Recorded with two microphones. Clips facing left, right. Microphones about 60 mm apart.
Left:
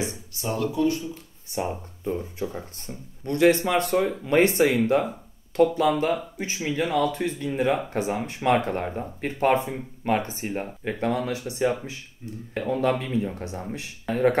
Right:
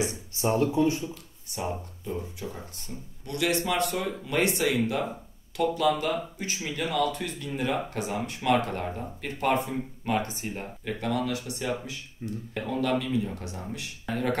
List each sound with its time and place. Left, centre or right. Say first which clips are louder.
0.4 s speech: right 1 dB; right
1.6 s speech: left 4 dB; left
12.2 s speech: right 4 dB; right
12.5 s speech: left 4 dB; left